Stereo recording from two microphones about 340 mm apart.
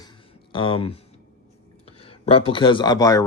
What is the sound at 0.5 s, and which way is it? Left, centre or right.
Speech, centre.